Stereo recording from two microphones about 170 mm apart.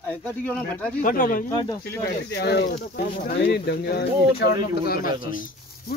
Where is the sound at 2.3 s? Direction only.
70° left (ahead or behind).